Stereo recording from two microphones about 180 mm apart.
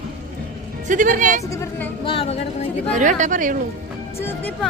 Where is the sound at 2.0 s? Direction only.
30° left (ahead or behind).